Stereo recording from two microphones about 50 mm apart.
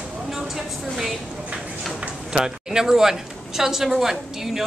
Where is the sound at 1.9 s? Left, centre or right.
Centre.